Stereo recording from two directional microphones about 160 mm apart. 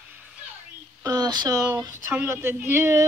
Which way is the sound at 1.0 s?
25° right (ahead or behind).